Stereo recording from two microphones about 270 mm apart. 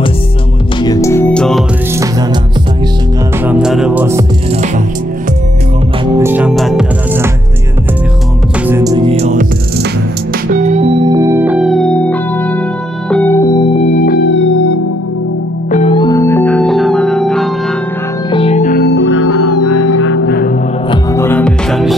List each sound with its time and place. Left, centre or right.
0.8 s music: centre
3.4 s music: centre
6.1 s music: centre
8.6 s music: centre
10.5 s music: right; by 13.7 s centre
14.0 s music: left
15.7 s music: left; by 17.5 s centre
18.3 s music: left
20.9 s music: centre